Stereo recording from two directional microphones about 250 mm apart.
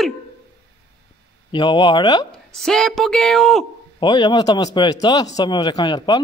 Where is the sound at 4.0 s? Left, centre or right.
Centre.